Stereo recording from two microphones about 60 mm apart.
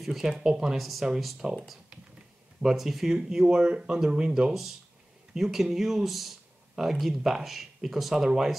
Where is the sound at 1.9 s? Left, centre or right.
Centre.